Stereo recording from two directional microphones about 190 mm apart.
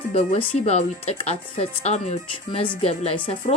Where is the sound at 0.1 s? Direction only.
35° left (ahead or behind).